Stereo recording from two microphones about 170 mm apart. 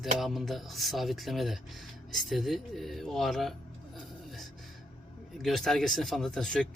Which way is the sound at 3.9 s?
Centre (ahead or behind).